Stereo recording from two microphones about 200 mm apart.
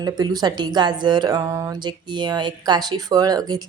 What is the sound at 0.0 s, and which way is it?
Speech, 20° right (ahead or behind).